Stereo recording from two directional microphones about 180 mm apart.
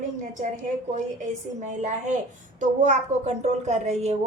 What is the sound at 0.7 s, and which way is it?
A woman's voice, 40° right (ahead or behind).